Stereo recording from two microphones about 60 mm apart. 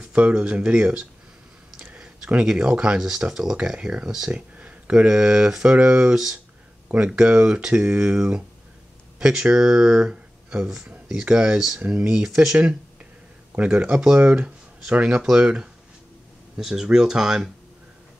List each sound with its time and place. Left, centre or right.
0.0 s speech: centre
4.3 s speech: right
13.5 s speech: right; by 17.5 s centre